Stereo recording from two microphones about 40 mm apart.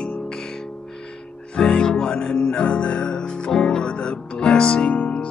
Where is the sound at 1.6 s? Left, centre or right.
Centre.